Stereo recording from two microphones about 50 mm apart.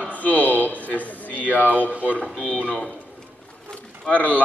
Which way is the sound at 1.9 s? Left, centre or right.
Right.